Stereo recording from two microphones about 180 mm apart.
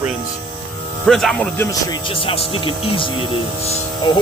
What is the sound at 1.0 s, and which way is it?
Speech, centre (ahead or behind).